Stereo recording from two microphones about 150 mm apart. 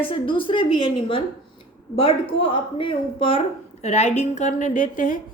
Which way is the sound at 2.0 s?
40° left (ahead or behind).